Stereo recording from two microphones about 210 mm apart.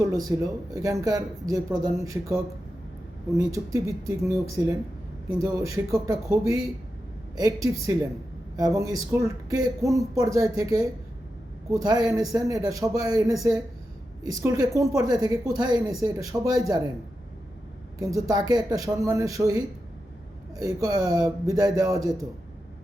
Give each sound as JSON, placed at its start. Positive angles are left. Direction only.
{"t": 0.0, "sound": "speech", "side_deg": -15}
{"t": 18.0, "sound": "speech", "side_deg": -15}